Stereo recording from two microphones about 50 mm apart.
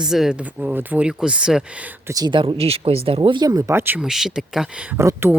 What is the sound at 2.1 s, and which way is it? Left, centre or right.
Speech, right.